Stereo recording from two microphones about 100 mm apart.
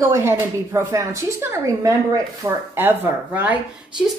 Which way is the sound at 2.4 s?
20° right (ahead or behind).